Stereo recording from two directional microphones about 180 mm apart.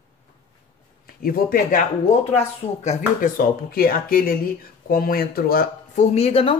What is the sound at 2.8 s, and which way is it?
Speech, 45° left (ahead or behind).